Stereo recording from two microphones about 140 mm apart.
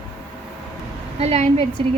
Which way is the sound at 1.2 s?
50° right (ahead or behind).